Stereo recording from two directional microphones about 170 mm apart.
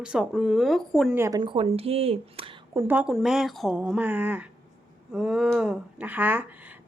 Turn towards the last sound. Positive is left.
turn(degrees=-10)  # may be behind; listen again after turning